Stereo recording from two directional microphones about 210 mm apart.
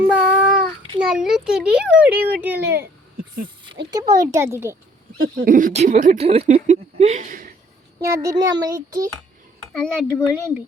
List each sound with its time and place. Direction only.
0.0 s child singing: 5° right (ahead or behind)
0.9 s a child's voice: 5° right (ahead or behind)
4.0 s a child's voice: 15° right (ahead or behind)
5.5 s speech: 40° right (ahead or behind)
8.1 s a child's voice: 15° right (ahead or behind)
9.8 s a child's voice: 5° left (ahead or behind)